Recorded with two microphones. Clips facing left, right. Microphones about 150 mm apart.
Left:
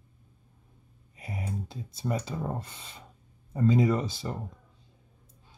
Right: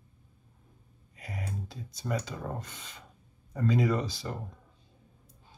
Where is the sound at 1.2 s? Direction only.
25° left (ahead or behind).